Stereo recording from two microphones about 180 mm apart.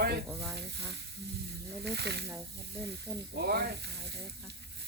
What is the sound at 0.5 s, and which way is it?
Speech, 70° right (ahead or behind).